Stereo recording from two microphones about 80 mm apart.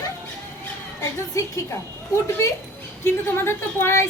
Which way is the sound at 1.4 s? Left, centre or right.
Left.